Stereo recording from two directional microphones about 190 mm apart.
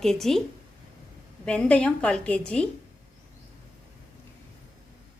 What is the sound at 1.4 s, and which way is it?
A woman's voice, 5° left (ahead or behind).